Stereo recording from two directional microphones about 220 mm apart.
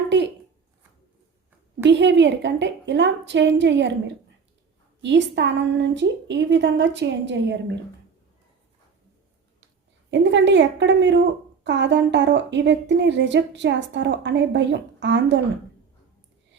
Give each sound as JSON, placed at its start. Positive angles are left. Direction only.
{"t": 1.8, "sound": "a woman's voice", "side_deg": -55}
{"t": 10.1, "sound": "a woman's voice", "side_deg": -55}